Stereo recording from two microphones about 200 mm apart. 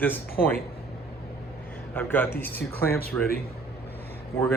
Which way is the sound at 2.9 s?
50° left (ahead or behind).